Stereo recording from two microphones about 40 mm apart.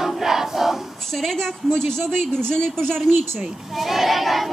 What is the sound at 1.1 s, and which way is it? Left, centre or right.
A woman's voice, centre.